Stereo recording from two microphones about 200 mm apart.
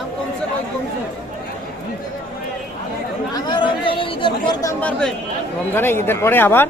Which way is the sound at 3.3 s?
25° left (ahead or behind).